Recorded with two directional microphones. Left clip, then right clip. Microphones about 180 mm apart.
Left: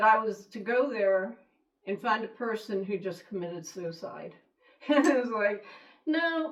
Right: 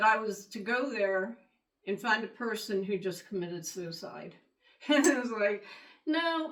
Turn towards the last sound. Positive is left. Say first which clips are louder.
# left 2 dB
turn(degrees=-30)  # may be behind; listen again after turning